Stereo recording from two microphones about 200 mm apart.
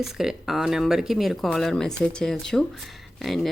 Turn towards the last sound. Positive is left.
turn(degrees=0)  # may be behind; listen again after turning